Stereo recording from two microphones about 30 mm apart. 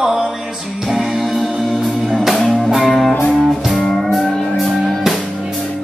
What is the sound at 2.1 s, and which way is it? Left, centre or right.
Music, centre.